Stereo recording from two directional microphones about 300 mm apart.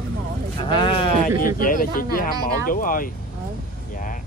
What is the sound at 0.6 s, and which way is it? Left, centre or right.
Speech, centre.